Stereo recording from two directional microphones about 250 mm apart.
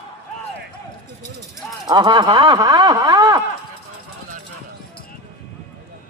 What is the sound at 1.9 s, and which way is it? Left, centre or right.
Speech, centre.